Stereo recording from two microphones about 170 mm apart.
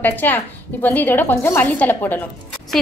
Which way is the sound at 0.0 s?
10° left (ahead or behind).